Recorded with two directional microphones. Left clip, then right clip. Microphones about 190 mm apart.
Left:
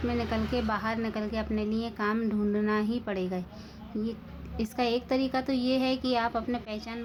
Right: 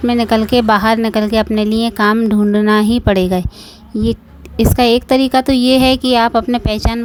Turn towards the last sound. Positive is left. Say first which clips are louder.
# right 18 dB
turn(degrees=-55)  # may be behind; listen again after turning